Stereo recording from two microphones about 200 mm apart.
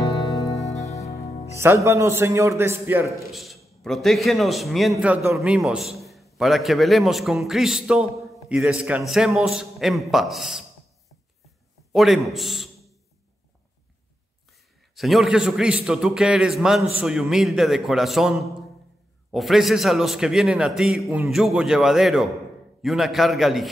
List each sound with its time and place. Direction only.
0.7 s music: 15° left (ahead or behind)
1.6 s a man's voice: 15° right (ahead or behind)
11.9 s a man's voice: centre (ahead or behind)
15.0 s a man's voice: centre (ahead or behind)